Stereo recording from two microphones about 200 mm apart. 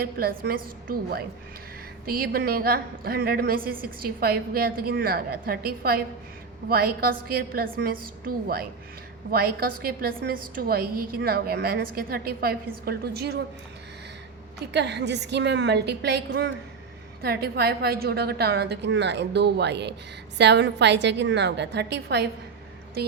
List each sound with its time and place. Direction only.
0.0 s a woman's voice: 50° right (ahead or behind)
14.7 s a woman's voice: 60° right (ahead or behind)